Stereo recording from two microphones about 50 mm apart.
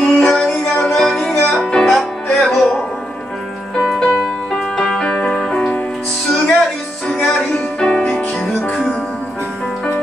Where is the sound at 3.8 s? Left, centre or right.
Centre.